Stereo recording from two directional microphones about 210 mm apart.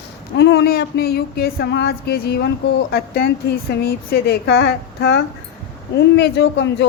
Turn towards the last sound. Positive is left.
turn(degrees=55)  # may be behind; listen again after turning